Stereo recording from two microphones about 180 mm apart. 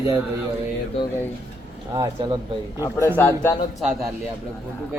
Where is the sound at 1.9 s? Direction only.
25° right (ahead or behind).